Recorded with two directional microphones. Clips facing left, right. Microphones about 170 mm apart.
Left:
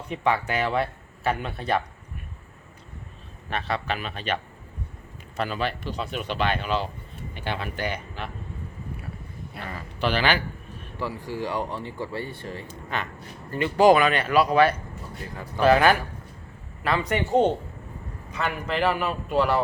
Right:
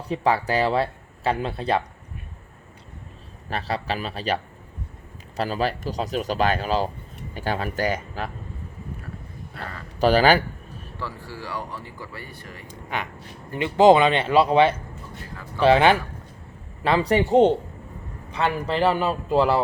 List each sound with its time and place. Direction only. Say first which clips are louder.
0.1 s speech: right 3 dB; 35° right (ahead or behind)
3.5 s speech: right 1 dB; 35° right (ahead or behind)
5.4 s speech: right 3 dB; 35° right (ahead or behind)
10.0 s a sound: right 7 dB; 40° right (ahead or behind)
11.0 s speech: left 5 dB; 15° left (ahead or behind)
12.6 s a man's voice: right 4 dB; 15° right (ahead or behind)